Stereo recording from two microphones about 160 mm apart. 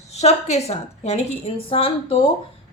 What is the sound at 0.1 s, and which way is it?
Speech, 45° left (ahead or behind).